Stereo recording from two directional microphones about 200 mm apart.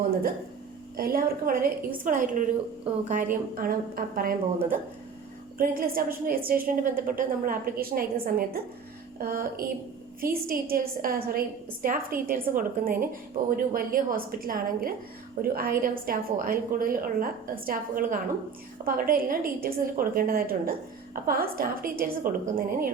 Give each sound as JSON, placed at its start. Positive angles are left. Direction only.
{"t": 0.9, "sound": "a woman's voice", "side_deg": -50}